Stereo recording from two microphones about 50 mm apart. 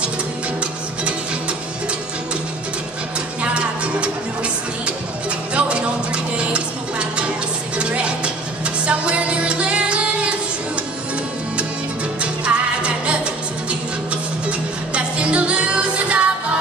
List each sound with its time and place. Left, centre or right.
5.5 s music: right
7.7 s music: right
12.2 s music: right
15.0 s music: right